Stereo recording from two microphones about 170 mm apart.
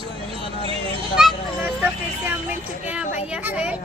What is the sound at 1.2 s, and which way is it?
Speech, 5° right (ahead or behind).